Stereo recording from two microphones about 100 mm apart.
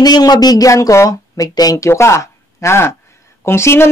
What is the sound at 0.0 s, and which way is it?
Speech, 45° left (ahead or behind).